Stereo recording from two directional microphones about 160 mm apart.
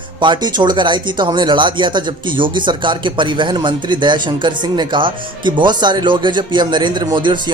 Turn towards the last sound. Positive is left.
turn(degrees=-30)  # may be behind; listen again after turning